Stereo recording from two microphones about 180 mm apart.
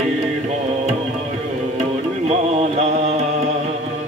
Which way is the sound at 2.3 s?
40° right (ahead or behind).